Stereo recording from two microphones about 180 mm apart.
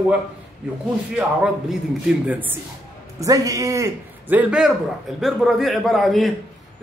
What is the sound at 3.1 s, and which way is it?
A man's voice, 20° right (ahead or behind).